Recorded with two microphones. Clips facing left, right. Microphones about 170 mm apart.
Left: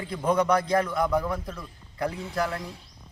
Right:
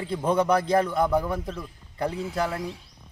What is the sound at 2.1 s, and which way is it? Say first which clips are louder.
Speech: right 2 dB; 5° right (ahead or behind).